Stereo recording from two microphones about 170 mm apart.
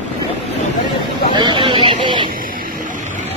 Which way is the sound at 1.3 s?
30° right (ahead or behind).